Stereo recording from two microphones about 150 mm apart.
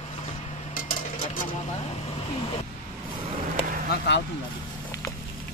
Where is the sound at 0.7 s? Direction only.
65° left (ahead or behind).